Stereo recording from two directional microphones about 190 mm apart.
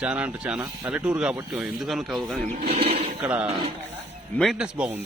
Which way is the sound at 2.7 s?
30° right (ahead or behind).